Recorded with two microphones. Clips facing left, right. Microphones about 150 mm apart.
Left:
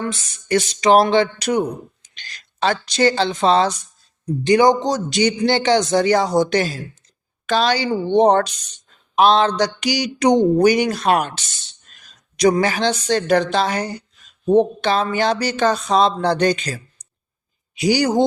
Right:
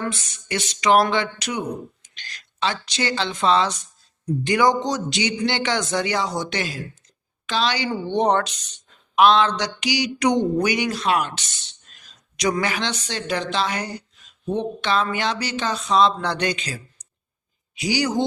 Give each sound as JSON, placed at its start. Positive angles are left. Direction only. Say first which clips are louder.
{"t": 0.0, "sound": "speech", "louder": "left 2 dB", "side_deg": 25}
{"t": 0.4, "sound": "speech", "louder": "left 5 dB", "side_deg": 40}
{"t": 5.0, "sound": "a woman's voice", "louder": "left 6 dB", "side_deg": 45}
{"t": 8.0, "sound": "speech", "louder": "left 6 dB", "side_deg": 30}
{"t": 12.4, "sound": "speech", "louder": "left 7 dB", "side_deg": 35}
{"t": 12.9, "sound": "speech", "louder": "left 10 dB", "side_deg": 50}